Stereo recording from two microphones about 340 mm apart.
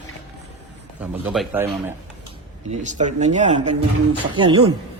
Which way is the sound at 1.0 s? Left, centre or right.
Centre.